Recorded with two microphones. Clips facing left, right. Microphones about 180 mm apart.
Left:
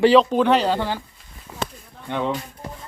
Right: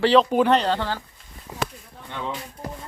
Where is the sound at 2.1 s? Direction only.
70° left (ahead or behind).